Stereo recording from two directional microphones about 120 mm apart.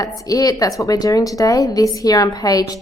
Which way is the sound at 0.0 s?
30° left (ahead or behind).